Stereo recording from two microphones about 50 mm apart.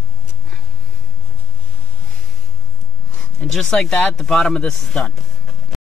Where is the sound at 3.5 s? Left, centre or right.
Centre.